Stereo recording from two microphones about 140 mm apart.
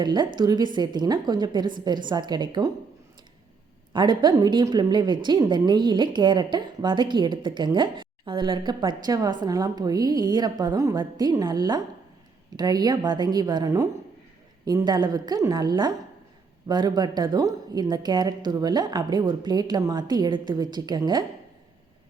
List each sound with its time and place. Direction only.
0.0 s a woman's voice: 30° right (ahead or behind)
3.9 s a woman's voice: 35° right (ahead or behind)